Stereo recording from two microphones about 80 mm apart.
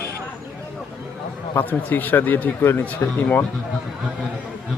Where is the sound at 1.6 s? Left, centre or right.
Left.